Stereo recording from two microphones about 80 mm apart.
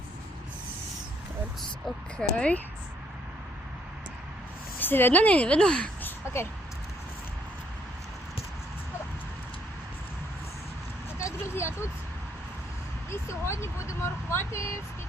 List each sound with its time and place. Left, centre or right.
2.1 s a woman's voice: centre
4.8 s a woman's voice: left
6.0 s a sound: left
11.2 s vehicle: left
13.1 s speech: left